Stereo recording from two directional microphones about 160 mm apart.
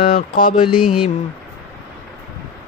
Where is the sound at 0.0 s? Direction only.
60° left (ahead or behind).